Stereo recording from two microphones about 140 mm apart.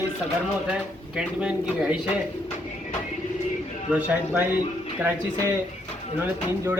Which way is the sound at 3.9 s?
10° right (ahead or behind).